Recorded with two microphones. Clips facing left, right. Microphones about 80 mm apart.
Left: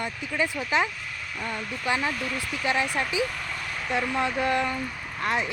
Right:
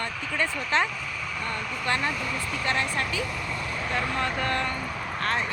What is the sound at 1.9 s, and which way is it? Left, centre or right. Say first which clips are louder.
Speech: left 1 dB; centre.